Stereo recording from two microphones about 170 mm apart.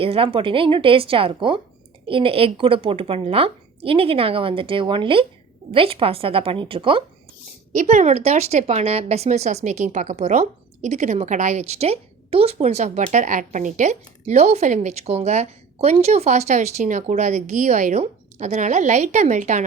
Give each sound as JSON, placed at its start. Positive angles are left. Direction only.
{"t": 0.0, "sound": "speech", "side_deg": -35}
{"t": 7.7, "sound": "speech", "side_deg": -45}